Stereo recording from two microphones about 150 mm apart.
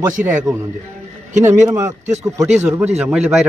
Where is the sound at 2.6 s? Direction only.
10° right (ahead or behind).